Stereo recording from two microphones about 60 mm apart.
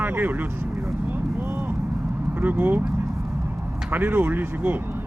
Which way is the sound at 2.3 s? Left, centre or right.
Right.